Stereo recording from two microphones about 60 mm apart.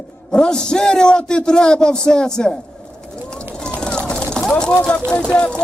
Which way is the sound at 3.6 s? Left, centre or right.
Centre.